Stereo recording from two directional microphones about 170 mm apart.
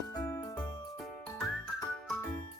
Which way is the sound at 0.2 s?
15° left (ahead or behind).